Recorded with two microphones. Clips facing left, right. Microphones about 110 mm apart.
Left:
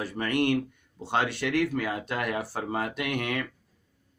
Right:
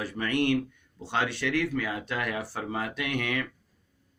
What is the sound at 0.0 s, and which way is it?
Speech, 45° left (ahead or behind).